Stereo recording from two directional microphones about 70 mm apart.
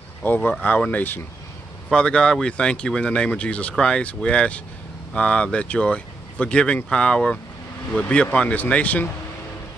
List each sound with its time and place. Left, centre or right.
0.2 s speech: left
1.9 s speech: centre